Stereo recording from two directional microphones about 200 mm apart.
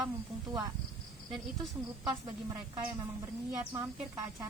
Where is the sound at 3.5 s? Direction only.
15° right (ahead or behind).